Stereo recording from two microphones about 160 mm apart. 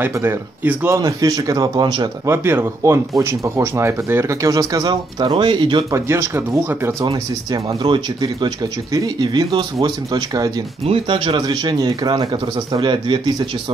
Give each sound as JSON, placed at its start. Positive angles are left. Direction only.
{"t": 0.0, "sound": "speech", "side_deg": -15}
{"t": 2.3, "sound": "speech", "side_deg": -15}
{"t": 5.9, "sound": "speech", "side_deg": -15}
{"t": 7.1, "sound": "speech", "side_deg": -30}